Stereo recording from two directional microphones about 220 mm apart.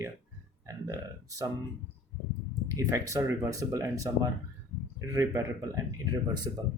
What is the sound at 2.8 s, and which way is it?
Speech, 15° right (ahead or behind).